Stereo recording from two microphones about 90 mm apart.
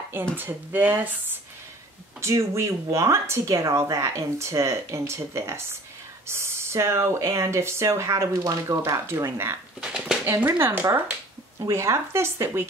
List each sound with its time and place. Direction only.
0.1 s speech: 25° right (ahead or behind)
2.2 s speech: 35° right (ahead or behind)
9.8 s a sound: 5° right (ahead or behind)
10.2 s speech: 25° right (ahead or behind)
11.6 s speech: 35° right (ahead or behind)